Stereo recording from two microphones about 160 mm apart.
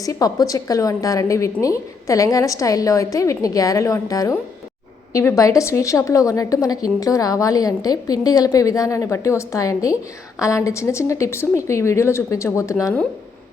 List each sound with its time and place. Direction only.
0.0 s a woman's voice: 20° left (ahead or behind)